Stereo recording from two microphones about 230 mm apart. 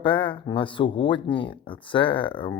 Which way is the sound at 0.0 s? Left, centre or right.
Left.